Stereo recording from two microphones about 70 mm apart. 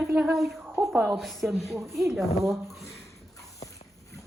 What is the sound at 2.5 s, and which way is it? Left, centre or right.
Speech, centre.